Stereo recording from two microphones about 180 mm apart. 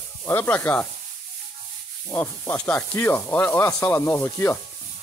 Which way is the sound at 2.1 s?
15° left (ahead or behind).